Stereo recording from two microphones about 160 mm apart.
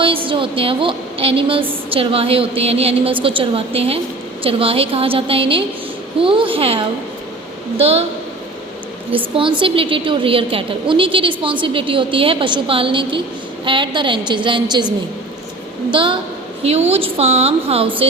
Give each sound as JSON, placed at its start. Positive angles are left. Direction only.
{"t": 0.0, "sound": "a woman's voice", "side_deg": -35}
{"t": 9.1, "sound": "a woman's voice", "side_deg": -35}